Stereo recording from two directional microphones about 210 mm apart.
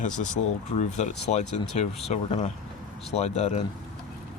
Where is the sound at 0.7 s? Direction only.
35° left (ahead or behind).